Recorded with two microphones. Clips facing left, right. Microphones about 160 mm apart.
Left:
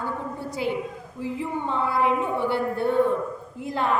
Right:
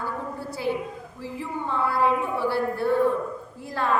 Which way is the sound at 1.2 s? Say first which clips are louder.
Left 4 dB; 20° left (ahead or behind).